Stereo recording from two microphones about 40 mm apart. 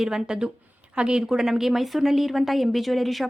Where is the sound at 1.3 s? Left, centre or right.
Centre.